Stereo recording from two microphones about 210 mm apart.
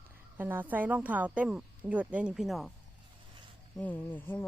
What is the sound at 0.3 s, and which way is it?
A woman's voice, 10° right (ahead or behind).